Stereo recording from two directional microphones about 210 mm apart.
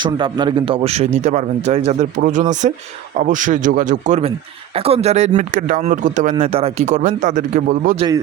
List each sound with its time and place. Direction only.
0.0 s speech: 20° right (ahead or behind)